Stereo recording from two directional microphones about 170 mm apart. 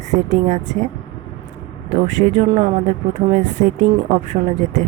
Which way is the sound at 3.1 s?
45° right (ahead or behind).